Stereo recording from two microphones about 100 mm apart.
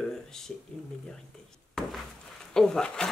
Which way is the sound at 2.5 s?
5° left (ahead or behind).